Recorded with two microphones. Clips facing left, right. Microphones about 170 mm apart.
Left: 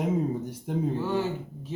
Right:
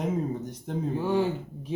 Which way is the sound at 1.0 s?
15° right (ahead or behind).